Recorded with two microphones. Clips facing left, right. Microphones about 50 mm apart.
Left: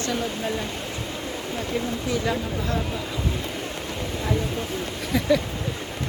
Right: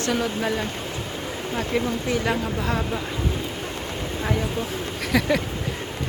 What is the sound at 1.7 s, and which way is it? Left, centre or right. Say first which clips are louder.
Speech: right 2 dB; right.